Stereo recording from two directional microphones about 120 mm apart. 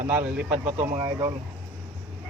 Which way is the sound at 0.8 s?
30° right (ahead or behind).